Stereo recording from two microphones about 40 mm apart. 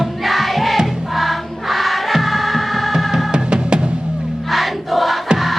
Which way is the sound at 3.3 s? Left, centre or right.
Right.